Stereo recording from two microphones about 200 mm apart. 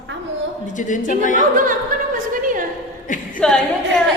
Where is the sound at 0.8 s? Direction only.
40° left (ahead or behind).